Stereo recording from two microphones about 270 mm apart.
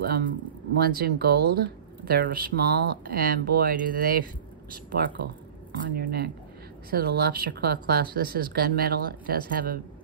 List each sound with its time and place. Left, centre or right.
0.0 s speech: right